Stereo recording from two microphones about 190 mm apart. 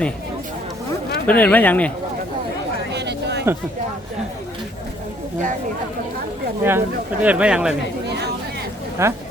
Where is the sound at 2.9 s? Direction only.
60° right (ahead or behind).